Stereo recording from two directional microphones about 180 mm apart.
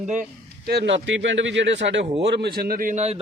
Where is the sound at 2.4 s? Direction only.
60° right (ahead or behind); by 3.2 s 40° right (ahead or behind).